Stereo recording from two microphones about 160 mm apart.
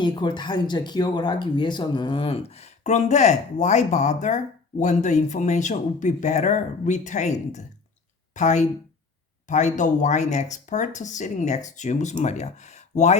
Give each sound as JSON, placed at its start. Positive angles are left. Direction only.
{"t": 0.0, "sound": "speech", "side_deg": 30}